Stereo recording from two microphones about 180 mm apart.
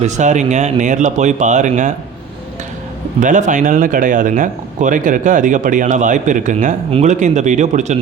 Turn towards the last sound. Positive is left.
turn(degrees=-40)  # may be behind; listen again after turning